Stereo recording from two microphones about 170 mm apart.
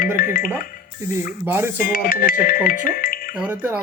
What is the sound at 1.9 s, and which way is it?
Speech, 55° left (ahead or behind).